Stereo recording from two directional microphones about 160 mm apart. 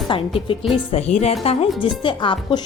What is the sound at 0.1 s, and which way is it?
Speech, 35° left (ahead or behind).